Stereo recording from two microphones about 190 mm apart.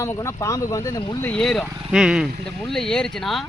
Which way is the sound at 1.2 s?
5° left (ahead or behind).